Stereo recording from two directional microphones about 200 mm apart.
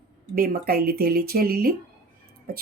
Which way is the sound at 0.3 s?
45° right (ahead or behind).